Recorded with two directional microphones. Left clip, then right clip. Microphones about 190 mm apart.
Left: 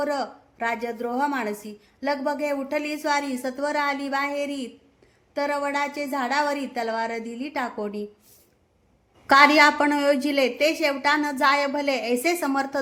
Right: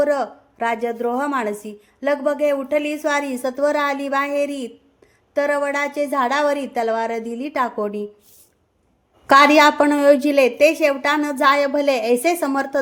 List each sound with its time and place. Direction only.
0.0 s a woman's voice: 25° right (ahead or behind)
9.2 s a woman's voice: 20° right (ahead or behind)